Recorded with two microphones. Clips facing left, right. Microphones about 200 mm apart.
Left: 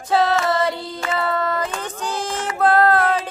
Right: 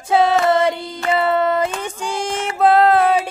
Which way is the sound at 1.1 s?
20° right (ahead or behind).